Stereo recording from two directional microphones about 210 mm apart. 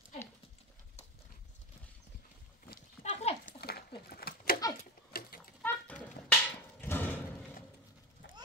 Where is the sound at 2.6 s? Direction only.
40° left (ahead or behind).